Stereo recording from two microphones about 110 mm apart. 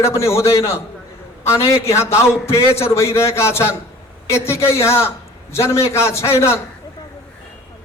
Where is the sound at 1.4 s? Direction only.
25° left (ahead or behind).